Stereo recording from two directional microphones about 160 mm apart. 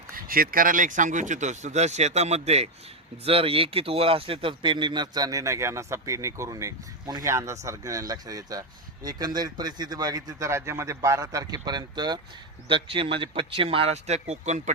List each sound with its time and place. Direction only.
0.1 s speech: 60° right (ahead or behind); by 14.7 s 45° right (ahead or behind)